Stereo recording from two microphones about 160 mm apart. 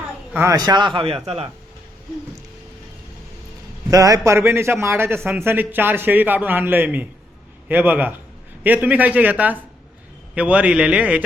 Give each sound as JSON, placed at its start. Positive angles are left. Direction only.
{"t": 0.3, "sound": "a man's voice", "side_deg": -20}
{"t": 3.8, "sound": "a man's voice", "side_deg": -20}